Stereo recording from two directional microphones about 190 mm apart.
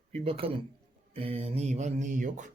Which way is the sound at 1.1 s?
30° right (ahead or behind).